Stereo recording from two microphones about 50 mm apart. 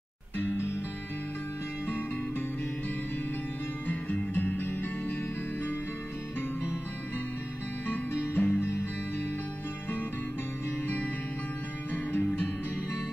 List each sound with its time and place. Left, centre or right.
1.9 s music: left
3.8 s music: left
8.4 s music: left
11.9 s music: left